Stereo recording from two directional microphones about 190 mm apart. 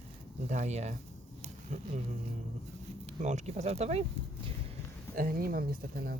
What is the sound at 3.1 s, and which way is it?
Speech, 40° right (ahead or behind).